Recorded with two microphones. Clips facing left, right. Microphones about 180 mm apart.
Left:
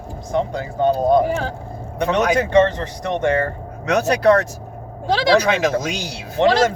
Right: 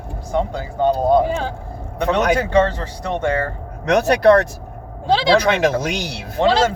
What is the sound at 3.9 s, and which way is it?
Speech, 65° right (ahead or behind).